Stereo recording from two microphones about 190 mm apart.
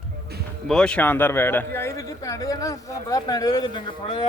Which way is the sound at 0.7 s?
5° left (ahead or behind).